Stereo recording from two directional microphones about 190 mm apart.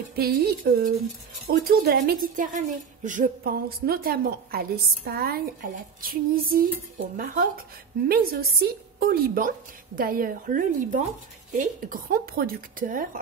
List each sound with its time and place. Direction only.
0.1 s a woman's voice: 55° right (ahead or behind)